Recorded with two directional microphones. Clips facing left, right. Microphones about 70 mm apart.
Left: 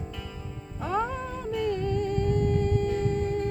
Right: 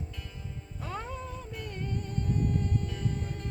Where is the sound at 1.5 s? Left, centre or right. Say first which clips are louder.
Left 16 dB; left.